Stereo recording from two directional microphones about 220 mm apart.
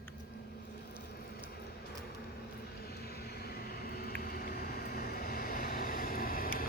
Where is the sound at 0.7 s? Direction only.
45° left (ahead or behind).